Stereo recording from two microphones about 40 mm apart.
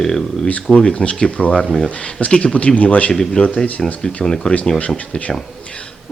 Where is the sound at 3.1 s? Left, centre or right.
Centre.